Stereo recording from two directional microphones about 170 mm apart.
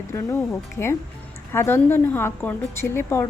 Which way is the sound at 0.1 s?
15° left (ahead or behind).